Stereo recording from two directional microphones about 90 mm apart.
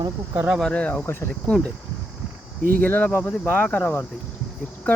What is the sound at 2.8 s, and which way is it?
Speech, 20° left (ahead or behind).